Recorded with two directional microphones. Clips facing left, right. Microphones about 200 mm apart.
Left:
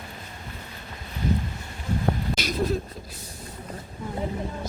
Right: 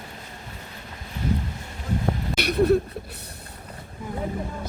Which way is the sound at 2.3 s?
60° right (ahead or behind).